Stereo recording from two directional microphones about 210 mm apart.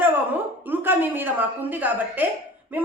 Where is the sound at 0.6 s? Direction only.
10° right (ahead or behind).